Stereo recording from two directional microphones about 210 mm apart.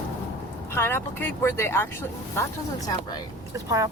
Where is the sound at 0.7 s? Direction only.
10° left (ahead or behind).